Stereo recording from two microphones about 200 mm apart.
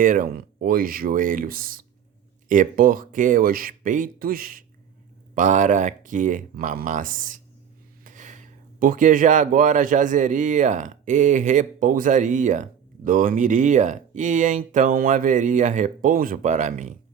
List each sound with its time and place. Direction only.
0.0 s speech: 45° right (ahead or behind)